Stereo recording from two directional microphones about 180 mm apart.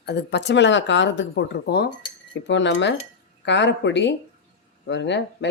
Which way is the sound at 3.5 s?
80° left.